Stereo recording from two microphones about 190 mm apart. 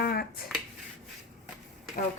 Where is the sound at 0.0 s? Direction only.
55° left (ahead or behind).